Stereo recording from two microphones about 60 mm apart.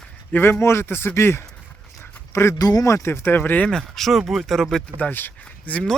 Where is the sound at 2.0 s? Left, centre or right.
Left.